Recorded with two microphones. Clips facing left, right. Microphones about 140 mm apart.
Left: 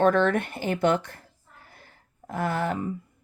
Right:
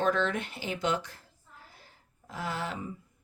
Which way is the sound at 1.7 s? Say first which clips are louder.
Left 3 dB; 55° left (ahead or behind).